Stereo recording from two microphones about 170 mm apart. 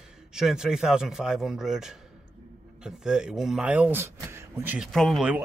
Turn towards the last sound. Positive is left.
turn(degrees=-5)  # may be behind; listen again after turning